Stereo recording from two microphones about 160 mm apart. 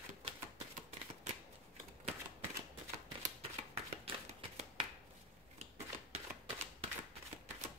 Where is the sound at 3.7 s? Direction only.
40° right (ahead or behind).